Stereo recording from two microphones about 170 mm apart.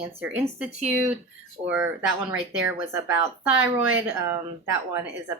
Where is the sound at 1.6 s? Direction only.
10° right (ahead or behind).